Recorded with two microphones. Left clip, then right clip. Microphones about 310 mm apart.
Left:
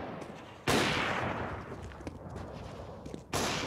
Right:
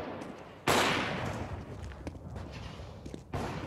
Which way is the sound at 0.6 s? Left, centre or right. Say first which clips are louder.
Right 2 dB; centre.